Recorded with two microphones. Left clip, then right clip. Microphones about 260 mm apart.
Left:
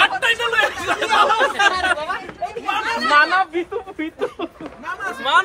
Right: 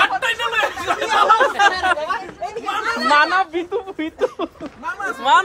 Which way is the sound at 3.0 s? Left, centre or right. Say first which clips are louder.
Even; right.